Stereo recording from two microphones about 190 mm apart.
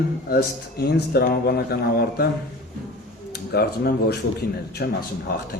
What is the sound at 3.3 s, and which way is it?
A man's voice, 60° left (ahead or behind).